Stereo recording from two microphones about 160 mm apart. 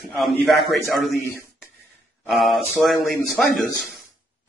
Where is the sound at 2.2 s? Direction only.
Centre (ahead or behind).